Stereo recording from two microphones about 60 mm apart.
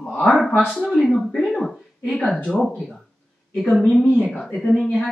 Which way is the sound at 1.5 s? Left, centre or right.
Centre.